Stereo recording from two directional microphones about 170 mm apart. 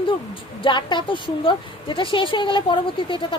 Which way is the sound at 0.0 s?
30° left (ahead or behind).